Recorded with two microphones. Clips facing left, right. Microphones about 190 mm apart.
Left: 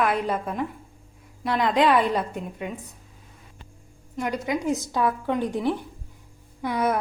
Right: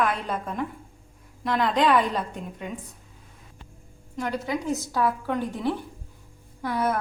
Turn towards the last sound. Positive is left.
turn(degrees=15)  # may be behind; listen again after turning